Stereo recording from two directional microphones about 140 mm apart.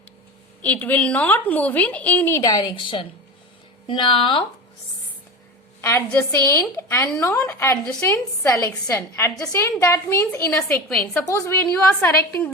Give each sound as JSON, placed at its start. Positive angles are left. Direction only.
{"t": 0.6, "sound": "a woman's voice", "side_deg": 10}
{"t": 2.4, "sound": "a woman's voice", "side_deg": 30}
{"t": 6.1, "sound": "a woman's voice", "side_deg": 20}
{"t": 7.3, "sound": "a woman's voice", "side_deg": 20}
{"t": 10.8, "sound": "a woman's voice", "side_deg": 5}